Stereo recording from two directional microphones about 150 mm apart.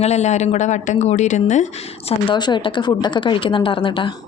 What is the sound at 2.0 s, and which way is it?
A woman's voice, 30° left (ahead or behind).